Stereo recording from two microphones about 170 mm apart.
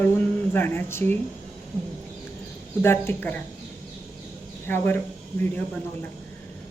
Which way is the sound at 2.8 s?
15° left (ahead or behind).